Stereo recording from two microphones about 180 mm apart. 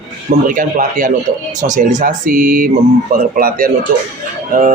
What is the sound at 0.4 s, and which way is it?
Speech, 50° right (ahead or behind).